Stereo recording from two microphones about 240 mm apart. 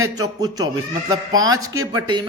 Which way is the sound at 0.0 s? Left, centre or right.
Centre.